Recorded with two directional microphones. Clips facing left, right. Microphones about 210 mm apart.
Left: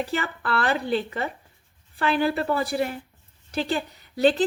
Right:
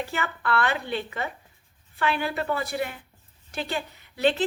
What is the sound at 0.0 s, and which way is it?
A woman's voice, 35° left (ahead or behind).